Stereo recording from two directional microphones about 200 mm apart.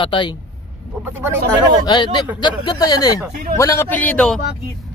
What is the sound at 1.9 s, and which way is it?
Speech, 20° left (ahead or behind).